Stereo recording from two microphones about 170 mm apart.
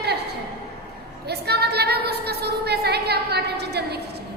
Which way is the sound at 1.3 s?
75° right (ahead or behind).